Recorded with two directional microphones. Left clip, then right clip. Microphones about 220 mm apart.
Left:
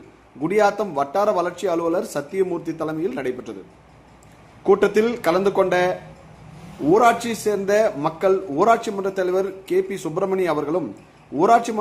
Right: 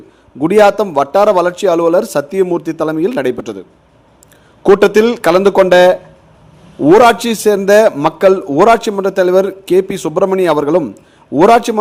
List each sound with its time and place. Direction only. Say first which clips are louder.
0.4 s a man's voice: right 10 dB; 45° right (ahead or behind)
4.6 s a man's voice: right 9 dB; 45° right (ahead or behind)